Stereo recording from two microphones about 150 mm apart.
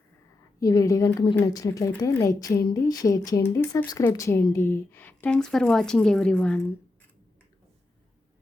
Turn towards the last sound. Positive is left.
turn(degrees=5)  # may be behind; listen again after turning